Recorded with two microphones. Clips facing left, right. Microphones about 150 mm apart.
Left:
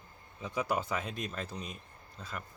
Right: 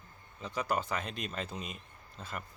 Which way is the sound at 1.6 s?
90° right.